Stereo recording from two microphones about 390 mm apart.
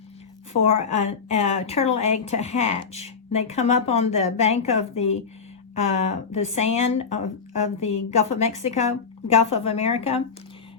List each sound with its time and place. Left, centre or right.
0.6 s a woman's voice: centre